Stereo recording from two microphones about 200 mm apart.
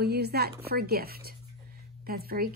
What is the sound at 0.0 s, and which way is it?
Speech, 50° right (ahead or behind).